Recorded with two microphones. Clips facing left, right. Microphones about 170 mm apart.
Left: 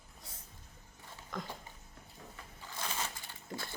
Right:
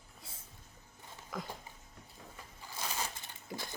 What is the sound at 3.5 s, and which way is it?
Pig, 10° right (ahead or behind).